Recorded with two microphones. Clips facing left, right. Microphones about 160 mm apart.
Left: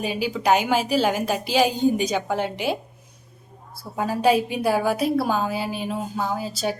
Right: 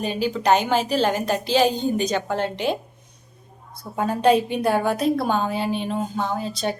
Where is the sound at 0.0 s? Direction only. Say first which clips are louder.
Right 1 dB; 10° left (ahead or behind).